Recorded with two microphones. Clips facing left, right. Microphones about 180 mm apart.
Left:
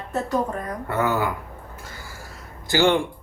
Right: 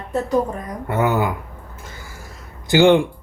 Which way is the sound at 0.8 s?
20° right (ahead or behind).